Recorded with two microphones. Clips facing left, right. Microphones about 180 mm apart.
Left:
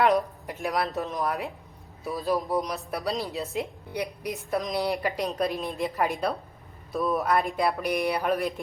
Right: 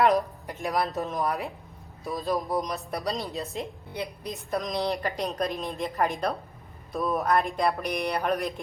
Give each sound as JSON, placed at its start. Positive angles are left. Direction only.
{"t": 0.0, "sound": "a woman's voice", "side_deg": 0}
{"t": 3.9, "sound": "a woman's voice", "side_deg": 15}
{"t": 4.4, "sound": "a woman's voice", "side_deg": 0}